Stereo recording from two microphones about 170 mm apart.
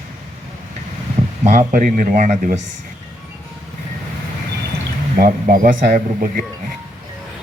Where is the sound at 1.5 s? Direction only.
50° right (ahead or behind).